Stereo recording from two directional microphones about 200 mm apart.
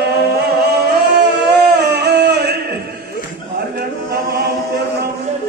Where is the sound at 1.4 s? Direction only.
55° right (ahead or behind).